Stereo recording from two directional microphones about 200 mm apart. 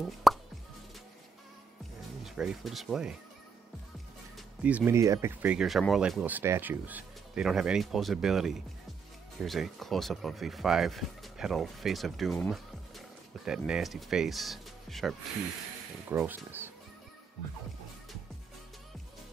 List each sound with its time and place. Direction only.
0.0 s plop: centre (ahead or behind)
2.2 s speech: 5° right (ahead or behind)
4.4 s speech: 5° right (ahead or behind)